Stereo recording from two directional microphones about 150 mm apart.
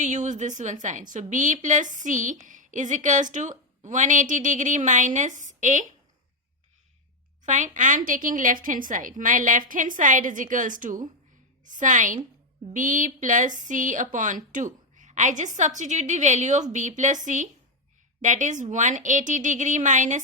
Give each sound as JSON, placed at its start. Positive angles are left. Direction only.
{"t": 0.0, "sound": "a woman's voice", "side_deg": -55}
{"t": 7.4, "sound": "a woman's voice", "side_deg": -55}